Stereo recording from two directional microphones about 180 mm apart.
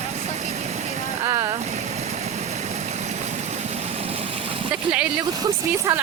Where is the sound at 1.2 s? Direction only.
20° right (ahead or behind).